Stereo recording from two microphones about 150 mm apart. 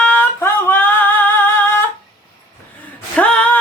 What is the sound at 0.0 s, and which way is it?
Music, 15° left (ahead or behind).